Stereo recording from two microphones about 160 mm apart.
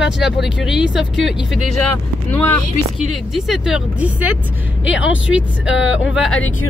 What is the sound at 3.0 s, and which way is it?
Speech, centre (ahead or behind).